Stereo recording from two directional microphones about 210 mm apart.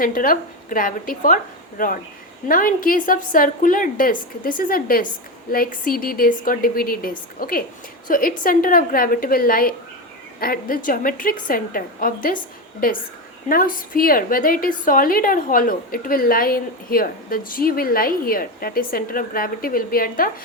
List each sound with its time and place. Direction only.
0.0 s a woman's voice: 40° left (ahead or behind)
13.5 s a woman's voice: 45° left (ahead or behind)